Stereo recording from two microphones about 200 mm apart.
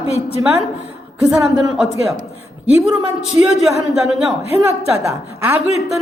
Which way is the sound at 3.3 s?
30° left (ahead or behind).